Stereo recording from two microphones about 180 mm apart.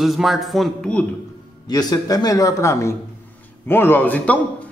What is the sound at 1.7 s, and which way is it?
Speech, 20° left (ahead or behind).